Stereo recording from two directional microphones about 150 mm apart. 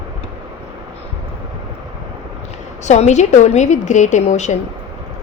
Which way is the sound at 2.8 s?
50° left (ahead or behind).